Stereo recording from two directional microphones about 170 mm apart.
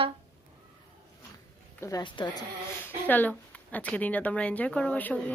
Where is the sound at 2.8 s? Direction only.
10° left (ahead or behind).